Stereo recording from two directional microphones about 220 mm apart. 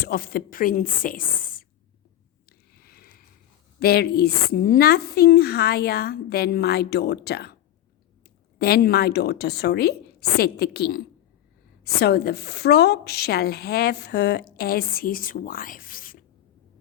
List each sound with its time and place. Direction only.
0.0 s a woman's voice: 45° left (ahead or behind)
2.5 s a sound: 45° left (ahead or behind)
3.8 s a woman's voice: 45° left (ahead or behind)
8.5 s a woman's voice: 45° left (ahead or behind)